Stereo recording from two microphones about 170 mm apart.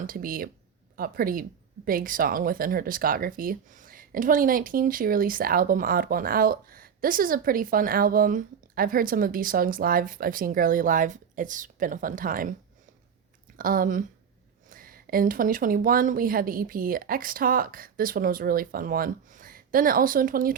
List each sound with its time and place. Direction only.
0.0 s speech: 55° right (ahead or behind)
13.6 s speech: 55° right (ahead or behind)